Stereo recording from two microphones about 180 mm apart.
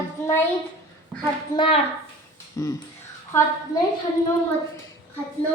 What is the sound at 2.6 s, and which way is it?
Speech, 15° left (ahead or behind).